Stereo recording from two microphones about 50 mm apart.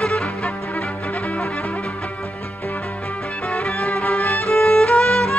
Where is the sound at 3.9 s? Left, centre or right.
Left.